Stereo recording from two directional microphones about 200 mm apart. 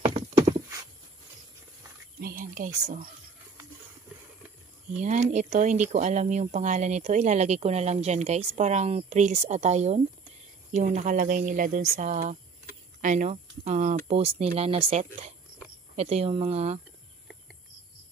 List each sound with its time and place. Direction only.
0.0 s clip-clop: 25° right (ahead or behind)
2.1 s speech: 45° right (ahead or behind)
5.0 s speech: 35° right (ahead or behind)